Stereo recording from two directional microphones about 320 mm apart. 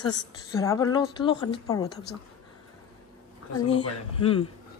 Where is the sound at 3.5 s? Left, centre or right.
Left.